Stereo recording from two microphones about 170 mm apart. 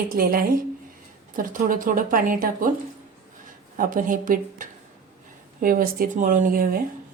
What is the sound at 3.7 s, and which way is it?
A woman's voice, 50° right (ahead or behind).